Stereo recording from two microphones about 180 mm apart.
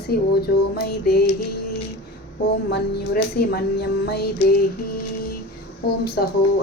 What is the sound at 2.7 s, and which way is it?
A woman's voice, 60° left (ahead or behind).